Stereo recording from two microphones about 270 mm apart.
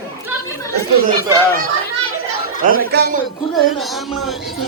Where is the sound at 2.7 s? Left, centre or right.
Right.